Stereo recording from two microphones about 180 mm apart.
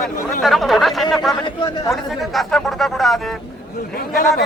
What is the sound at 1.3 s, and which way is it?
Speech, 25° left (ahead or behind).